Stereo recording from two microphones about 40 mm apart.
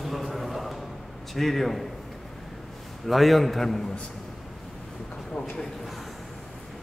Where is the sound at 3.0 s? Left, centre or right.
Centre.